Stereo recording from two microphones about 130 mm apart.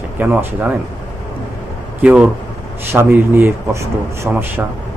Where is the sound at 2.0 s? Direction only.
10° right (ahead or behind).